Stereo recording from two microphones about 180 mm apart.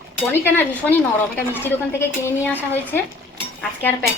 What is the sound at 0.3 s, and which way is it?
A woman's voice, 10° left (ahead or behind).